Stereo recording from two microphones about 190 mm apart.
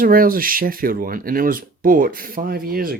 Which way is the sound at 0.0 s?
50° right (ahead or behind).